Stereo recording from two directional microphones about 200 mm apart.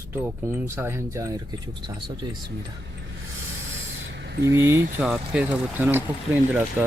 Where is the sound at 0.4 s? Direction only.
10° right (ahead or behind).